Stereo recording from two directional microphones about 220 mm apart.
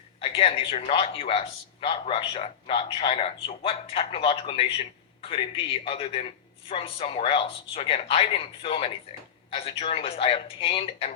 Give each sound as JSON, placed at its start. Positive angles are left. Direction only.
{"t": 0.2, "sound": "a man's voice", "side_deg": 25}
{"t": 5.8, "sound": "a man's voice", "side_deg": 25}